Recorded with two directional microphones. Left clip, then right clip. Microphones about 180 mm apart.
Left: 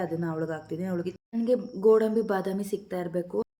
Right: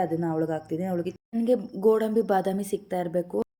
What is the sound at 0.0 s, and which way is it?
Speech, 15° right (ahead or behind).